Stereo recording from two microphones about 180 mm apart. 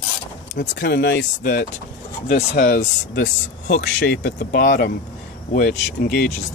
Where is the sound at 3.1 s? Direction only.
85° left.